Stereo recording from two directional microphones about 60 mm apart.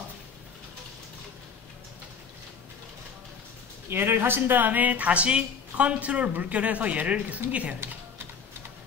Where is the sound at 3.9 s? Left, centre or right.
Right.